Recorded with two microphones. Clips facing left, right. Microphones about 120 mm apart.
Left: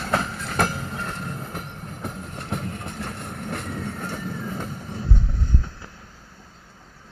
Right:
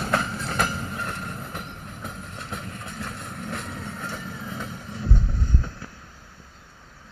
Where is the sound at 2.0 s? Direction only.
55° left (ahead or behind).